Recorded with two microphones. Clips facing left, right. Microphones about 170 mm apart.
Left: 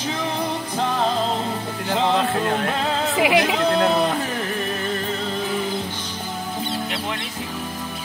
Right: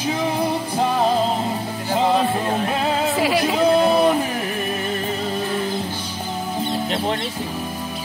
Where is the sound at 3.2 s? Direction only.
15° left (ahead or behind).